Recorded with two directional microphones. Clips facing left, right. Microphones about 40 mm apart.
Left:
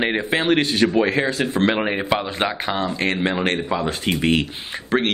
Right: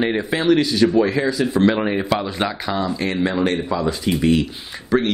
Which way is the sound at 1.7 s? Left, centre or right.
Left.